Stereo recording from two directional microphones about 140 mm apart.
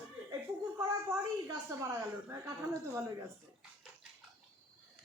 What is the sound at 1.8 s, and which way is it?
A woman's voice, 20° right (ahead or behind).